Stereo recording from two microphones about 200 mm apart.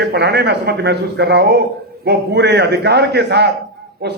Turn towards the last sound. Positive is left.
turn(degrees=-50)  # may be behind; listen again after turning